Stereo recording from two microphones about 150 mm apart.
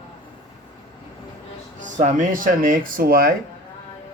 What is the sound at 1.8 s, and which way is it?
Speech, 55° right (ahead or behind).